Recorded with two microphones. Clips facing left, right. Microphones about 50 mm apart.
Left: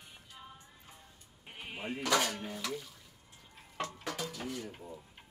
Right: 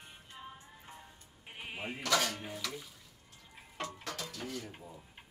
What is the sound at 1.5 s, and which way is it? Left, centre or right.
Bleat, centre.